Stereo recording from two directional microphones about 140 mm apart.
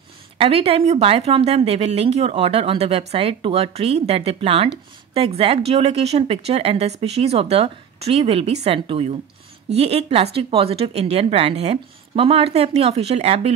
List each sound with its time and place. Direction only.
0.4 s a woman's voice: 45° right (ahead or behind)